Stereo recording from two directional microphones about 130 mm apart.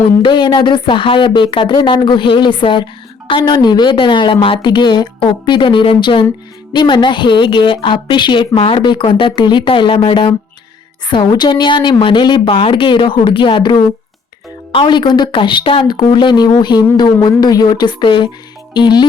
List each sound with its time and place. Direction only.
0.2 s a woman's voice: 35° left (ahead or behind)